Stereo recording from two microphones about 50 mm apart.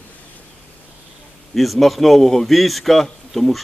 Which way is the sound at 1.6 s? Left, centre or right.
Centre.